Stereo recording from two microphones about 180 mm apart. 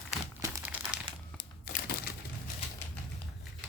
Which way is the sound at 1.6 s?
60° left (ahead or behind).